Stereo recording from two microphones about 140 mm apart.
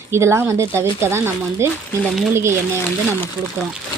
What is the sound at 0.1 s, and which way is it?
Speech, 20° right (ahead or behind).